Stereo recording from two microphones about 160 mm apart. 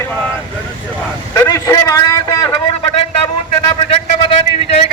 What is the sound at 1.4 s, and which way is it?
A man's voice, 20° left (ahead or behind).